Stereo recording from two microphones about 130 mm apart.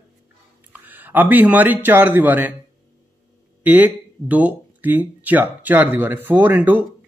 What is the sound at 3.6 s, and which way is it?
A man's voice, 15° right (ahead or behind).